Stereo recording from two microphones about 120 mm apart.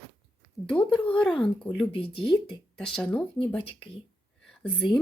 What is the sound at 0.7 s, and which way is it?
Speech, 10° left (ahead or behind).